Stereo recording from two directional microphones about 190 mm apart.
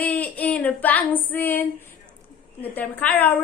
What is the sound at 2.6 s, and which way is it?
Speech, 10° left (ahead or behind).